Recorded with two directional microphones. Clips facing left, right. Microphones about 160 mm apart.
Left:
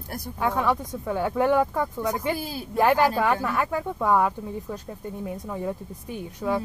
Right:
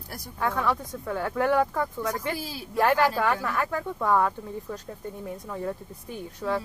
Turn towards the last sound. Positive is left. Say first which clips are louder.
# left 2 dB
turn(degrees=15)  # may be behind; listen again after turning